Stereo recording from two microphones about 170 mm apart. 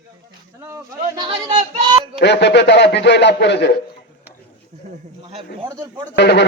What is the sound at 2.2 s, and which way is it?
A man's voice, 80° left.